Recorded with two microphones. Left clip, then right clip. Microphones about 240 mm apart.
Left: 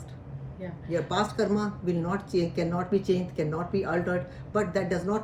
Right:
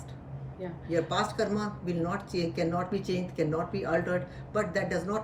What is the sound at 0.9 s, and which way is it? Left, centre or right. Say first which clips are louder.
Speech: left 1 dB; centre.